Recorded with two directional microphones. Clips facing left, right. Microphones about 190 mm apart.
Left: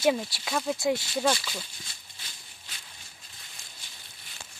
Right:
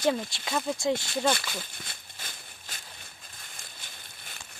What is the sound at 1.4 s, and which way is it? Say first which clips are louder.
Walk: right 1 dB; 50° right (ahead or behind).